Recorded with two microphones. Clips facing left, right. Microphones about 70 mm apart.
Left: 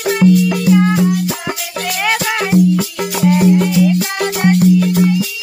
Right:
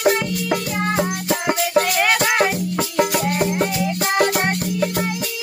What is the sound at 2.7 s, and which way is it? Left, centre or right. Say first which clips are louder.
Music: left 1 dB; right.